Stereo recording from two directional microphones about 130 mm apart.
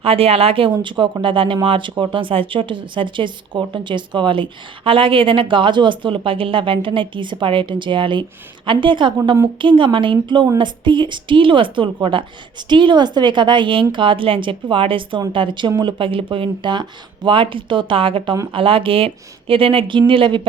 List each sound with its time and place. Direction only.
0.0 s speech: 45° right (ahead or behind)